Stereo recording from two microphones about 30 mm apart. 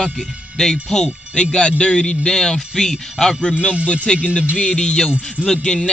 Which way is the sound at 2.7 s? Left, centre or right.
Centre.